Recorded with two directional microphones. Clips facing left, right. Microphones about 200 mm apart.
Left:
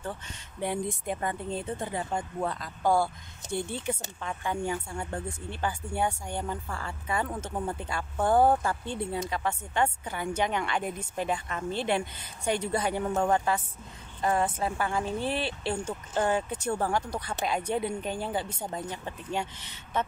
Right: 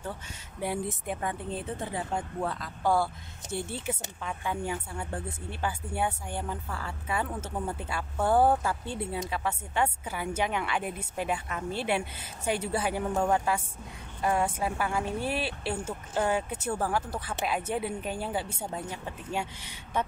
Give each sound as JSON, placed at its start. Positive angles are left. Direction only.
{"t": 0.0, "sound": "speech", "side_deg": -5}